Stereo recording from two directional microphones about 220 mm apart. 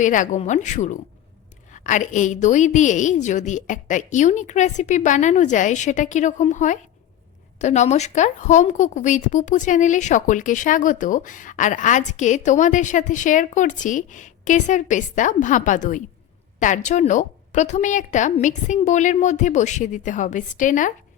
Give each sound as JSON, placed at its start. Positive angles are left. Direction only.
{"t": 0.0, "sound": "a woman's voice", "side_deg": 35}